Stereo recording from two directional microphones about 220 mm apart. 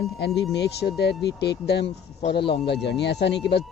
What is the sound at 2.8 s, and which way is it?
Speech, 50° left (ahead or behind).